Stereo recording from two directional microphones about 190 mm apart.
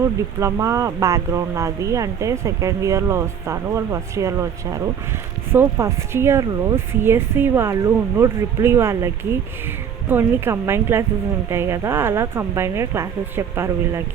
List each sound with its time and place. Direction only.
0.0 s speech: 15° right (ahead or behind)